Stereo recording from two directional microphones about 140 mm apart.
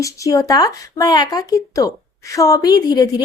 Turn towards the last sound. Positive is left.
turn(degrees=30)  # may be behind; listen again after turning